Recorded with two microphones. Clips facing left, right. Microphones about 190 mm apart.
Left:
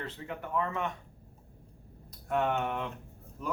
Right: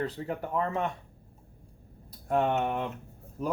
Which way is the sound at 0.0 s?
40° right (ahead or behind).